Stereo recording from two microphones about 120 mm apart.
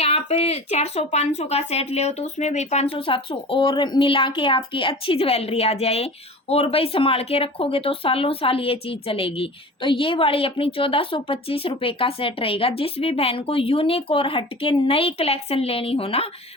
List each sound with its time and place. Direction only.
0.0 s speech: 60° left (ahead or behind)